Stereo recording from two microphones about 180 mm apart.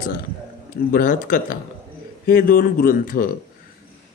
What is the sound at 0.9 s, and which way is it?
Speech, 50° left (ahead or behind).